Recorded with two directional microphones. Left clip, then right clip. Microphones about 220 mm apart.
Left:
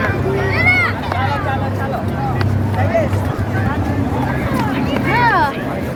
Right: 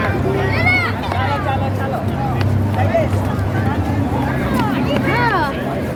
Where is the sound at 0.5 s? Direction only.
30° left (ahead or behind).